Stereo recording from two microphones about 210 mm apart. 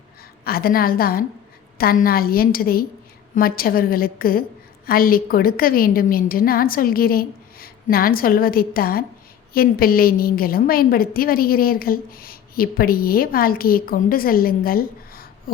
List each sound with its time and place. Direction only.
0.4 s a woman's voice: 45° left (ahead or behind)